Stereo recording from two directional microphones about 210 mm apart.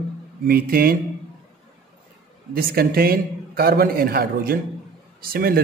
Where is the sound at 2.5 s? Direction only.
45° right (ahead or behind).